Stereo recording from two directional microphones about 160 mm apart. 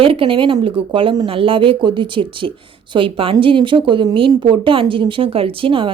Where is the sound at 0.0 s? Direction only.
35° right (ahead or behind).